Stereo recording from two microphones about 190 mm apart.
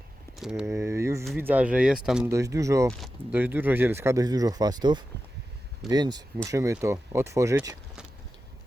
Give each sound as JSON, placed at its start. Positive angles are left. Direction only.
{"t": 0.3, "sound": "a sound", "side_deg": 0}
{"t": 0.6, "sound": "speech", "side_deg": -15}
{"t": 2.3, "sound": "speech", "side_deg": -15}